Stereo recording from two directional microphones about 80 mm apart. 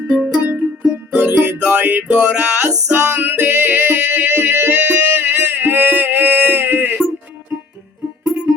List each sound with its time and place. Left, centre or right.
0.1 s music: right